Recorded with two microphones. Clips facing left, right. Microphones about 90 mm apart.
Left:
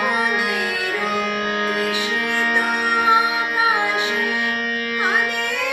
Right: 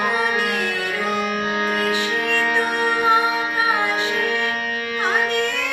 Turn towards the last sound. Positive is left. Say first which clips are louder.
# even
turn(degrees=15)  # may be behind; listen again after turning